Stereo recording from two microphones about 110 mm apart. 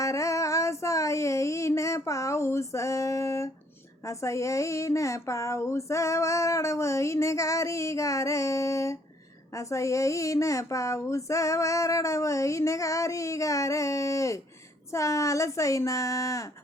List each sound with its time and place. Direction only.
0.0 s female singing: 30° left (ahead or behind)
4.0 s speech: 30° left (ahead or behind)